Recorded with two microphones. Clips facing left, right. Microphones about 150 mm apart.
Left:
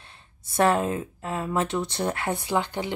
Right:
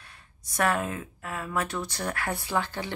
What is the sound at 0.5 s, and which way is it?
Speech, 25° left (ahead or behind).